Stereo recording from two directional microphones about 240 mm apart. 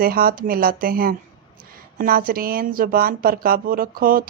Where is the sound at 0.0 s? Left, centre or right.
Right.